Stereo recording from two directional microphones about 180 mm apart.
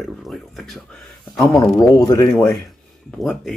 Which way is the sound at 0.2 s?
Centre (ahead or behind).